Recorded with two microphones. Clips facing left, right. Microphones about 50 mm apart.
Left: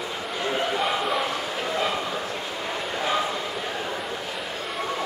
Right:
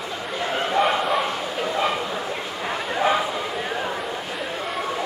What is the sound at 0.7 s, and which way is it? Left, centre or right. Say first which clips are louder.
Bow-wow: right 5 dB; centre.